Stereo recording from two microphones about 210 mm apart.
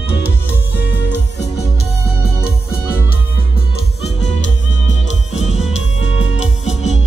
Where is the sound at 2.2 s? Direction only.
50° left (ahead or behind).